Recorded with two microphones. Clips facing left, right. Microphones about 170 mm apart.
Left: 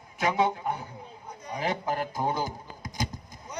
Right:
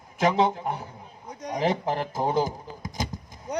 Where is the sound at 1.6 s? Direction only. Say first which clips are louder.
Right 4 dB; 30° right (ahead or behind).